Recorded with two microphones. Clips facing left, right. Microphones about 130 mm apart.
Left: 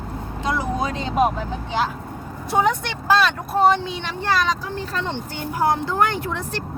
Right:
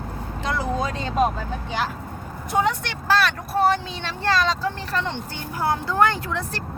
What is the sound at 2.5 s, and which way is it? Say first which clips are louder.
A woman's voice: left 2 dB; 20° left (ahead or behind).